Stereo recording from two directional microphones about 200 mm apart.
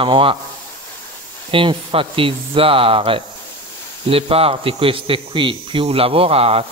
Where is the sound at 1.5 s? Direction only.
25° right (ahead or behind).